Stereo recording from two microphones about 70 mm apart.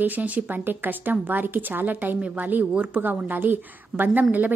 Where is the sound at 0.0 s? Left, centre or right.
Right.